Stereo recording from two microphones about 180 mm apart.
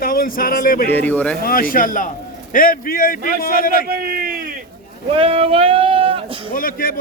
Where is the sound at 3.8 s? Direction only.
55° right (ahead or behind).